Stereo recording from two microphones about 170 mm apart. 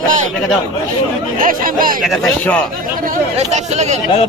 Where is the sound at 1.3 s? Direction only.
55° right (ahead or behind).